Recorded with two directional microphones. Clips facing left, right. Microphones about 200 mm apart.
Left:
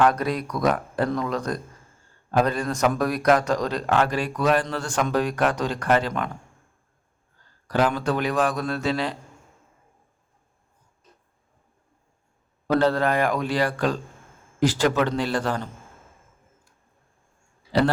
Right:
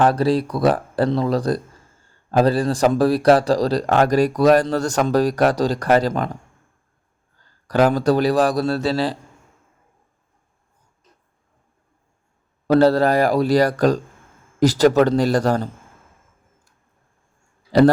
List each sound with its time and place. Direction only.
0.0 s speech: 30° right (ahead or behind)
7.7 s speech: 40° right (ahead or behind)
12.6 s speech: 35° right (ahead or behind)
17.7 s a man's voice: 40° right (ahead or behind)